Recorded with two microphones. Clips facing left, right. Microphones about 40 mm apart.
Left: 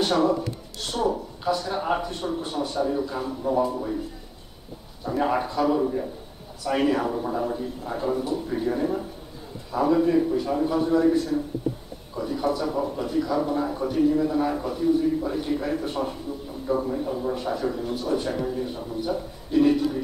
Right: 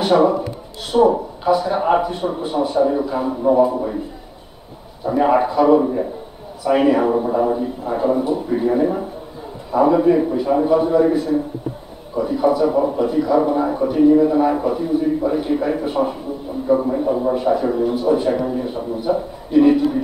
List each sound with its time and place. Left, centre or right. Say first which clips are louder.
0.0 s a man's voice: right 7 dB; centre
5.0 s a man's voice: right 9 dB; centre